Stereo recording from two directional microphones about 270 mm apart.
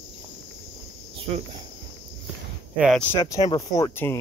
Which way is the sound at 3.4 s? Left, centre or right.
Centre.